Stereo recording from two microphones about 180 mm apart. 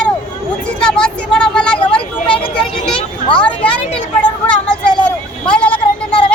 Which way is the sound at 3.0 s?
30° left (ahead or behind).